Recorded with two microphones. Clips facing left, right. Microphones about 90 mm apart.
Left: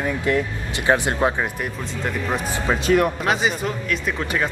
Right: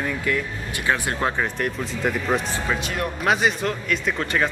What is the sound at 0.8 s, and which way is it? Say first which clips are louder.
Speech: left 4 dB; 25° left (ahead or behind).